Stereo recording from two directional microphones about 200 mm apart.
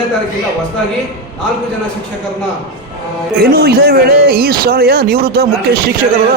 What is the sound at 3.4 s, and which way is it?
Speech, 50° right (ahead or behind).